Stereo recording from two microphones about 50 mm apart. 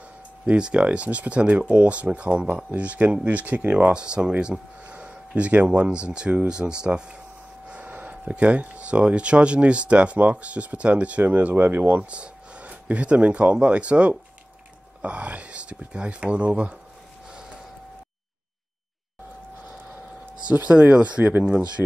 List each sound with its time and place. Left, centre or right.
0.5 s speech: right
7.7 s speech: right
12.1 s speech: right
20.5 s speech: right
21.2 s speech: right
21.8 s speech: centre